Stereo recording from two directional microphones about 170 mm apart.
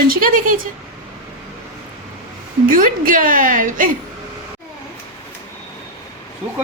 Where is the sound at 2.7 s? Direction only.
55° right (ahead or behind).